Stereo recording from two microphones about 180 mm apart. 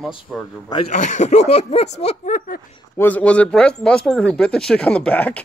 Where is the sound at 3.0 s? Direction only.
10° left (ahead or behind).